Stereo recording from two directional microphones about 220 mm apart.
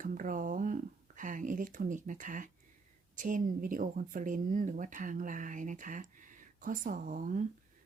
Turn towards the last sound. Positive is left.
turn(degrees=-35)  # may be behind; listen again after turning